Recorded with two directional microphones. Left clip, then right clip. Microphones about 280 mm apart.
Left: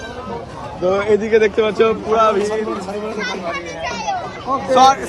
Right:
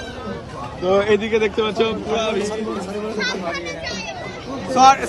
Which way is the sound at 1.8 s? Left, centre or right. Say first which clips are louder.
Left 9 dB; centre.